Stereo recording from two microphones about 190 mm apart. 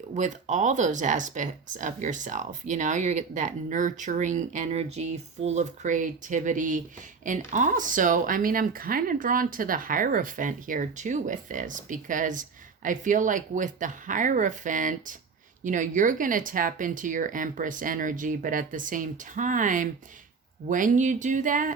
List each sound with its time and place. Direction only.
0.1 s speech: 40° right (ahead or behind)